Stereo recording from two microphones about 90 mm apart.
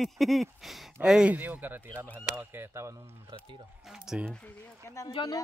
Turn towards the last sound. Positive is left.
turn(degrees=-5)  # may be behind; listen again after turning